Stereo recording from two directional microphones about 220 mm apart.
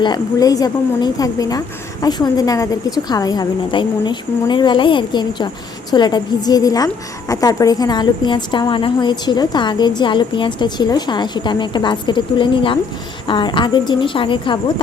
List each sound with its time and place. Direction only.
0.0 s a woman's voice: 15° left (ahead or behind)